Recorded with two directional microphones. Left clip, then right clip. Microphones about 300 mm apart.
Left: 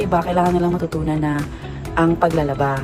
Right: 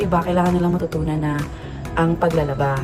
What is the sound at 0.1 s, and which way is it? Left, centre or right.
Speech, centre.